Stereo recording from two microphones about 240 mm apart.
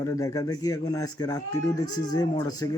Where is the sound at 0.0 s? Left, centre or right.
Centre.